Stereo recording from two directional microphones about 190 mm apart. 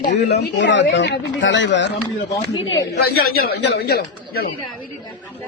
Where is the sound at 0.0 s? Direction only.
60° left (ahead or behind).